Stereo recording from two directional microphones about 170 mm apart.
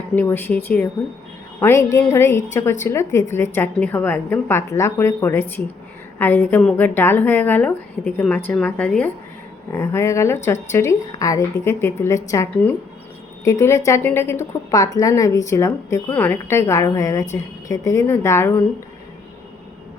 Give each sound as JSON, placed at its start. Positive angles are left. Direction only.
{"t": 0.2, "sound": "a woman's voice", "side_deg": 10}